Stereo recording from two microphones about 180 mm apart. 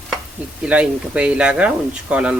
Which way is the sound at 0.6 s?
5° right (ahead or behind).